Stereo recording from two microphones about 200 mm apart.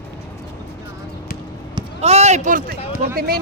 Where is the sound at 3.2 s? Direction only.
50° right (ahead or behind).